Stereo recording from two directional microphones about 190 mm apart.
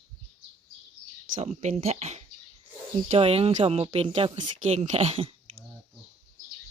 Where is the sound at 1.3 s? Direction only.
40° right (ahead or behind).